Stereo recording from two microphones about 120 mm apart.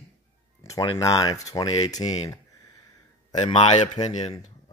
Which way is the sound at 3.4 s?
50° left (ahead or behind).